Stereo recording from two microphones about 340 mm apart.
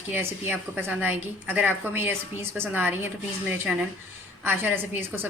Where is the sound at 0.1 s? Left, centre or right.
Centre.